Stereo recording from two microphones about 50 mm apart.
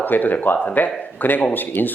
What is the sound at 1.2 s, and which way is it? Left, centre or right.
Speech, left.